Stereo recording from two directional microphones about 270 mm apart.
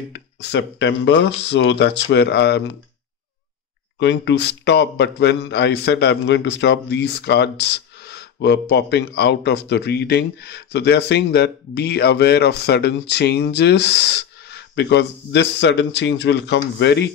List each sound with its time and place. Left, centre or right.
0.1 s a man's voice: left
4.0 s a man's voice: left